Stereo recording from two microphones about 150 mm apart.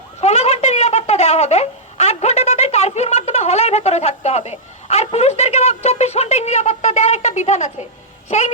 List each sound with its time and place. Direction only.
0.2 s speech: 45° left (ahead or behind)
8.3 s music: 50° left (ahead or behind)